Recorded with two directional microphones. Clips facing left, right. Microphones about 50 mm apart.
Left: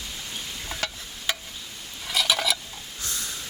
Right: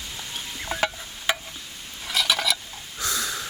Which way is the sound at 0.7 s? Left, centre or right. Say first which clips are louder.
Right 7 dB; right.